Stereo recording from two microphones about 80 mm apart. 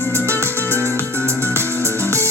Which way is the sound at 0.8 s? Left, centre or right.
Right.